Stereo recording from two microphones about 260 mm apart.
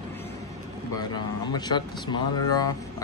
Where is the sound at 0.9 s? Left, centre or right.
Centre.